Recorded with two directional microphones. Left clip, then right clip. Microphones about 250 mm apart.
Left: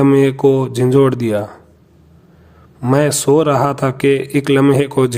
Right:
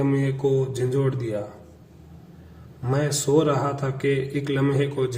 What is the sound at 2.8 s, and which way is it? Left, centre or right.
A man's voice, left.